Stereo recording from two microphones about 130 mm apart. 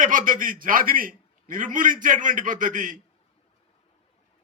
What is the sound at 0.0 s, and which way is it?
A man's voice, 90° right.